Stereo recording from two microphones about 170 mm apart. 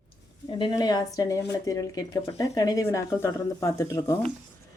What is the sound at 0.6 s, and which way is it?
Speech, 20° left (ahead or behind).